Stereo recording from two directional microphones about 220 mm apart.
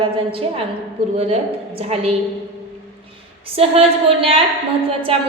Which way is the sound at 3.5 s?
25° right (ahead or behind).